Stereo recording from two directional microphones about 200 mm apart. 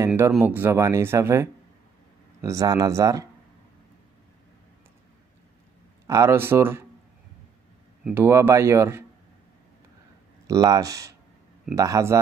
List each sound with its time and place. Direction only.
0.0 s speech: 10° right (ahead or behind)
6.0 s speech: 15° right (ahead or behind)
8.0 s speech: 10° right (ahead or behind)
10.4 s speech: 15° right (ahead or behind)